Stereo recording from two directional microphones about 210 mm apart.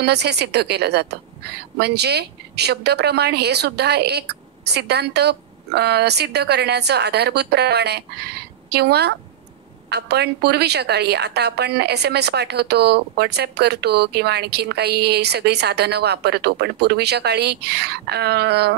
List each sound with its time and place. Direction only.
0.0 s a woman's voice: 50° right (ahead or behind)